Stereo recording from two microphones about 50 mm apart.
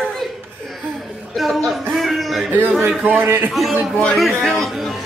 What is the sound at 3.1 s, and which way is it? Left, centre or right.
Speech, right.